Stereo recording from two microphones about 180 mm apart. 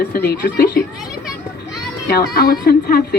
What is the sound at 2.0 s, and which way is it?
Speech, 60° left (ahead or behind).